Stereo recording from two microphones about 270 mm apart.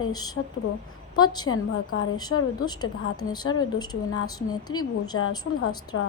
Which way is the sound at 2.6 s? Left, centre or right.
Centre.